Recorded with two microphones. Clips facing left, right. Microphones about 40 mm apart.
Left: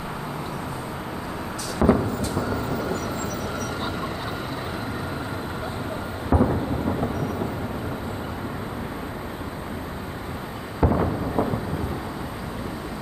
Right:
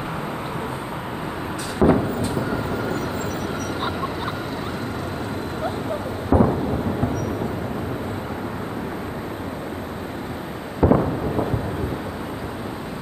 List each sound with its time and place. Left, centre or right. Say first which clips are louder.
1.8 s vehicle: right 3 dB; centre
6.3 s thunder: right 4 dB; centre
10.8 s a sound: right 5 dB; centre